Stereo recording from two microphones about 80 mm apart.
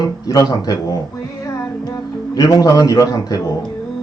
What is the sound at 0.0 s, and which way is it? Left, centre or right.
Speech, left.